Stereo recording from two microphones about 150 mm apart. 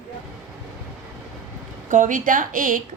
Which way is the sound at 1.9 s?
60° right (ahead or behind).